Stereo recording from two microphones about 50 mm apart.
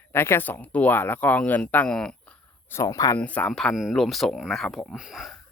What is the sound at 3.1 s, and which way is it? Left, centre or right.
Speech, left.